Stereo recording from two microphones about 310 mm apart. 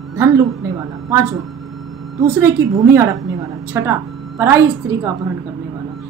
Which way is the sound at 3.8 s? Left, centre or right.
Centre.